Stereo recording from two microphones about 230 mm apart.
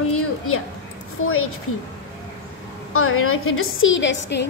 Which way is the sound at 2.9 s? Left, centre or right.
Left.